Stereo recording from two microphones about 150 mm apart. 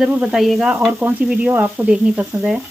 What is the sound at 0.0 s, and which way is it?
Speech, 5° right (ahead or behind).